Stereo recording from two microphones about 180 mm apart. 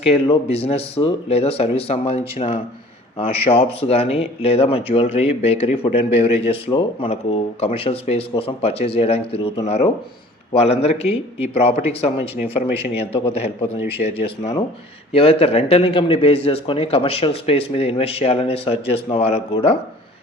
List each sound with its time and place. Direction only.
0.0 s speech: 35° left (ahead or behind)
11.1 s speech: 10° right (ahead or behind)
11.5 s speech: 35° left (ahead or behind)